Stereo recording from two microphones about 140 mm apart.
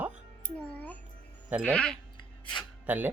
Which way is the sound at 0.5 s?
10° left (ahead or behind).